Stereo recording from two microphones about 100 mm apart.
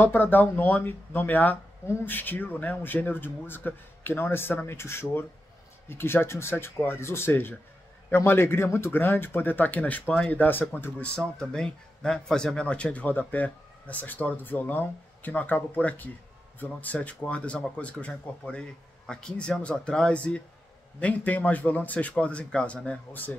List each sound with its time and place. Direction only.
0.0 s speech: 20° left (ahead or behind)
11.1 s speech: 5° left (ahead or behind)